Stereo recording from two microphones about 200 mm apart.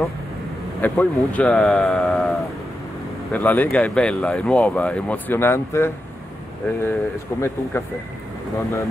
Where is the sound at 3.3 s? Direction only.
10° left (ahead or behind).